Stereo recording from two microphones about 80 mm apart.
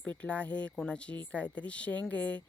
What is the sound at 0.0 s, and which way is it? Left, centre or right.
Speech, centre.